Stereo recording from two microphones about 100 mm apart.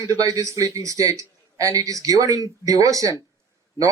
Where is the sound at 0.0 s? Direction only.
35° right (ahead or behind).